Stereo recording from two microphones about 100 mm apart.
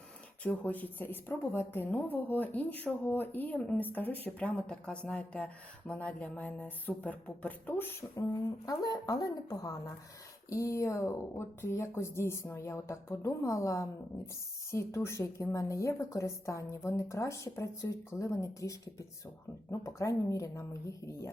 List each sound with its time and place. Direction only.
0.4 s a woman's voice: 15° left (ahead or behind)
8.6 s a woman's voice: 40° left (ahead or behind)